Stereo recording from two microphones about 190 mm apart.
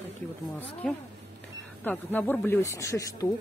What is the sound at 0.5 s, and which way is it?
Speech, 10° left (ahead or behind).